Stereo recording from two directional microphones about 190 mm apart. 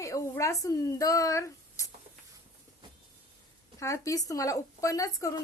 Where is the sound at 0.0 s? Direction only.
15° left (ahead or behind).